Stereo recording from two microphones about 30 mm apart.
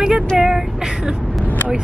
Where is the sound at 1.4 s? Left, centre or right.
Left.